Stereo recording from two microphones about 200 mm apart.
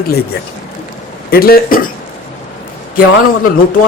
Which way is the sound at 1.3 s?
50° left (ahead or behind).